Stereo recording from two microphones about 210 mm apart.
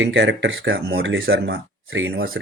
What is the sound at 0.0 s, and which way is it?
Speech, 60° right (ahead or behind).